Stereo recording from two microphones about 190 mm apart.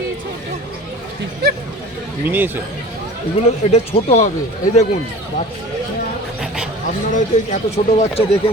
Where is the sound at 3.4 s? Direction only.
35° left (ahead or behind).